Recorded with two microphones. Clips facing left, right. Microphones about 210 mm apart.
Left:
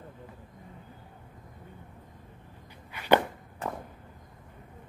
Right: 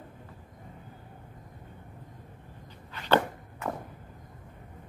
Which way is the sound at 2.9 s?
15° left (ahead or behind).